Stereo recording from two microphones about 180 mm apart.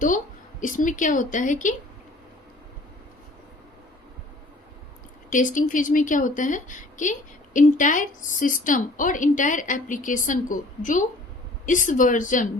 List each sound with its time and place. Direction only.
0.6 s a woman's voice: 45° left (ahead or behind)
5.3 s a woman's voice: 45° left (ahead or behind)